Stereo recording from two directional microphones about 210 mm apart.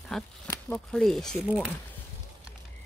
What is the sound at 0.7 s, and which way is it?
Speech, 5° left (ahead or behind).